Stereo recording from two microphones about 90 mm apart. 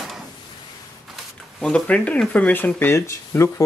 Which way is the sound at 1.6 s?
10° left (ahead or behind).